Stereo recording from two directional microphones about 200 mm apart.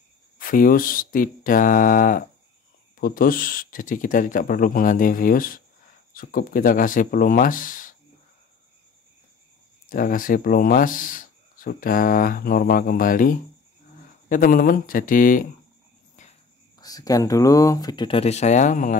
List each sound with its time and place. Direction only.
0.4 s speech: 45° left (ahead or behind)
9.8 s speech: 45° left (ahead or behind)
16.7 s speech: 20° left (ahead or behind); by 18.9 s 40° left (ahead or behind)